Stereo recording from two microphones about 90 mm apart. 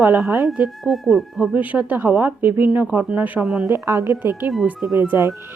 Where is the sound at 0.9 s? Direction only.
Centre (ahead or behind).